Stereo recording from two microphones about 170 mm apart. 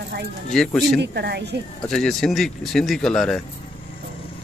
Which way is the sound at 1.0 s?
75° right (ahead or behind).